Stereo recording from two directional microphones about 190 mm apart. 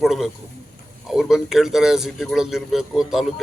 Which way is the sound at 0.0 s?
Centre (ahead or behind).